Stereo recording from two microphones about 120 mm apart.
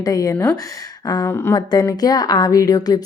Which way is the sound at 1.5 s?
35° left (ahead or behind).